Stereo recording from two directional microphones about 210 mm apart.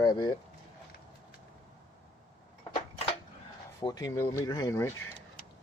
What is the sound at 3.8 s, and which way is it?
Speech, 15° left (ahead or behind).